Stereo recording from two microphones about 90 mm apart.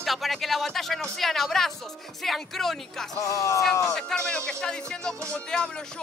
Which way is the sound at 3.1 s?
40° left (ahead or behind).